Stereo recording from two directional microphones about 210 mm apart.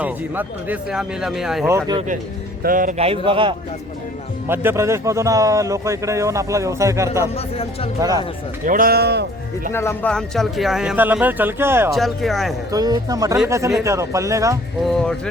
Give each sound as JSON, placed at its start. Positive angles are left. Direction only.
{"t": 0.0, "sound": "speech", "side_deg": -10}
{"t": 1.6, "sound": "a man's voice", "side_deg": -15}
{"t": 2.6, "sound": "a man's voice", "side_deg": -40}
{"t": 3.1, "sound": "a man's voice", "side_deg": -25}
{"t": 4.4, "sound": "a man's voice", "side_deg": -10}
{"t": 7.3, "sound": "speech", "side_deg": 30}
{"t": 7.9, "sound": "a man's voice", "side_deg": -15}
{"t": 8.6, "sound": "speech", "side_deg": -40}
{"t": 9.7, "sound": "speech", "side_deg": 10}
{"t": 11.9, "sound": "speech", "side_deg": 0}
{"t": 12.7, "sound": "a man's voice", "side_deg": -15}
{"t": 14.8, "sound": "speech", "side_deg": 0}